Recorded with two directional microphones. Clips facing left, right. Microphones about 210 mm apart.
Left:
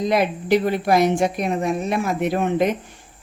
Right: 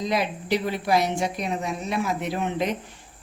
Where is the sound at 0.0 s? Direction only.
55° left (ahead or behind).